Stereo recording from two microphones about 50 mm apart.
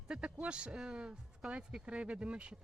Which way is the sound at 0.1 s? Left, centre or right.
Centre.